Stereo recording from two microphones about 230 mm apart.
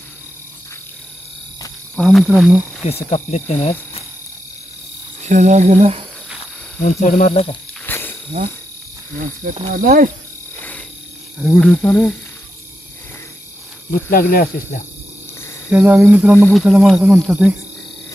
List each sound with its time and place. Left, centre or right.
2.0 s speech: centre
2.8 s speech: left
5.2 s cricket: right
6.8 s speech: left
7.8 s a sound: centre
9.4 s speech: right
11.5 s a sound: centre
14.1 s speech: left
15.7 s speech: centre
16.3 s speech: centre